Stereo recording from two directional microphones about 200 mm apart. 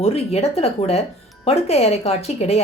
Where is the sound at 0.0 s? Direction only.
30° left (ahead or behind).